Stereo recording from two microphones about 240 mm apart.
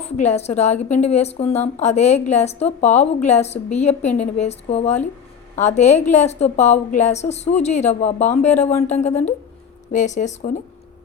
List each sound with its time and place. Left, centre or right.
0.2 s a woman's voice: left